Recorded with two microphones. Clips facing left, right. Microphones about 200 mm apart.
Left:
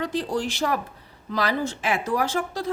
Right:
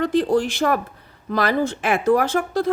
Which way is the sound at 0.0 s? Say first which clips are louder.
Right 7 dB; 55° right (ahead or behind).